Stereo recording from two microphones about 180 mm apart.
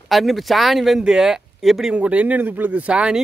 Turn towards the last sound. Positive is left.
turn(degrees=-5)  # may be behind; listen again after turning